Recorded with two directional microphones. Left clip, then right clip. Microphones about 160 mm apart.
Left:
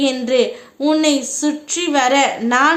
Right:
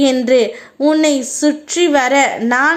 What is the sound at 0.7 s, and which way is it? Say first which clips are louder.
A woman's voice: right 3 dB; 20° right (ahead or behind).